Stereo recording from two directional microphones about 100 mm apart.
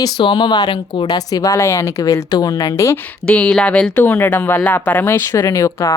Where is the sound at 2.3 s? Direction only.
40° left (ahead or behind).